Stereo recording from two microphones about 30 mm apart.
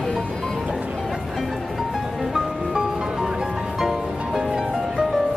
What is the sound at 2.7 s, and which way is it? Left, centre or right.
Music, right.